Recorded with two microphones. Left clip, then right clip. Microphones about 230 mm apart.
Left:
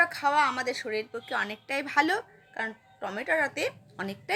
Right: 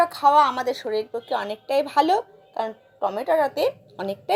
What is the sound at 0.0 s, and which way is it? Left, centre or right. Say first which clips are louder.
A woman's voice: right 7 dB; centre.